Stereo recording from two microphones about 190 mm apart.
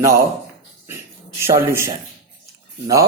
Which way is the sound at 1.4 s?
15° right (ahead or behind).